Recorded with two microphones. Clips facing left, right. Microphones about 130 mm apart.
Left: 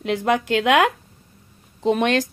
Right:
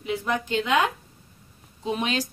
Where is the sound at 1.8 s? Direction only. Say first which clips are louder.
Left 8 dB; 65° left (ahead or behind).